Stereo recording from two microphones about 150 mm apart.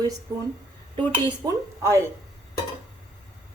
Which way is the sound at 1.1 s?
30° right (ahead or behind).